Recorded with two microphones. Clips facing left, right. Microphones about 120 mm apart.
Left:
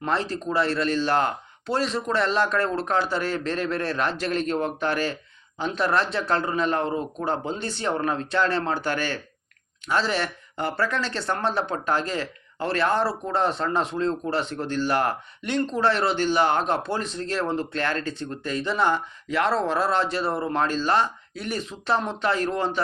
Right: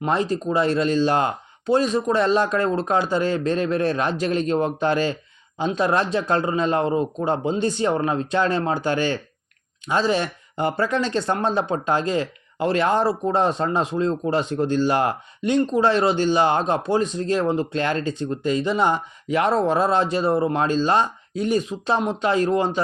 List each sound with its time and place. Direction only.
0.0 s speech: 15° right (ahead or behind)